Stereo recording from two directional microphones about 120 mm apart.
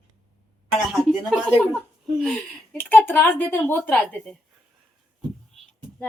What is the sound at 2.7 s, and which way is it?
A woman's voice, 15° left (ahead or behind).